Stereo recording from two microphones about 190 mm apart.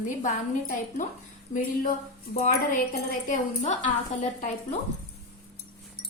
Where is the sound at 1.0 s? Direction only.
40° left (ahead or behind).